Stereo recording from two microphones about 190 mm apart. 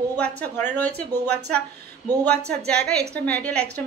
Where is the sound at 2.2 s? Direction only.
5° left (ahead or behind).